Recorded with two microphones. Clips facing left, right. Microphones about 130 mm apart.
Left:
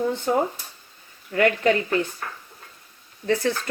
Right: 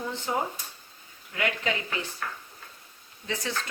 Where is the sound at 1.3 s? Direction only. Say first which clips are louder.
Left 10 dB; 50° left (ahead or behind).